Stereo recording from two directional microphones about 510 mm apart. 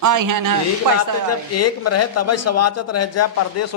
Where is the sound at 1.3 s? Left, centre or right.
Left.